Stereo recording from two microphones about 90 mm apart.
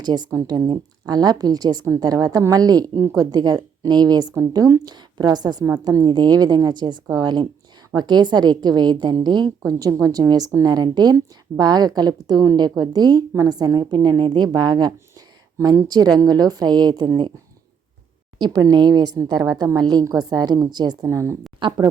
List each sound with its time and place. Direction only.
0.0 s a woman's voice: 50° right (ahead or behind)
0.3 s a woman's voice: 40° right (ahead or behind)
5.6 s a woman's voice: 40° right (ahead or behind)
6.1 s a woman's voice: 55° right (ahead or behind)
16.1 s a woman's voice: 45° right (ahead or behind)
18.3 s a woman's voice: 55° right (ahead or behind); by 21.3 s 35° right (ahead or behind)
21.6 s speech: 65° right (ahead or behind)